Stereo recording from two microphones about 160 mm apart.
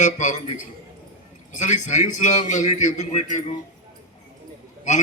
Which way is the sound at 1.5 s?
50° left (ahead or behind).